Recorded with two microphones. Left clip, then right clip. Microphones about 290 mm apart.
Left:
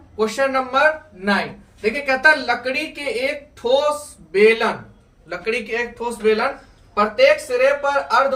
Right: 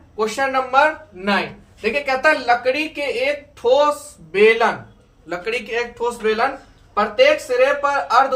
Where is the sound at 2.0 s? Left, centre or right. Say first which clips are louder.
Left 2 dB; centre.